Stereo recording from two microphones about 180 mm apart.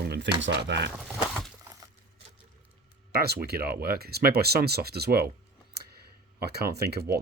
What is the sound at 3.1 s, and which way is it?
Speech, 60° right (ahead or behind).